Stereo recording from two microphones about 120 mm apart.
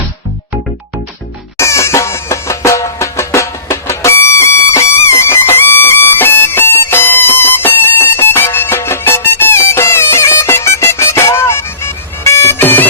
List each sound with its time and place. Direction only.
1.5 s music: 25° left (ahead or behind)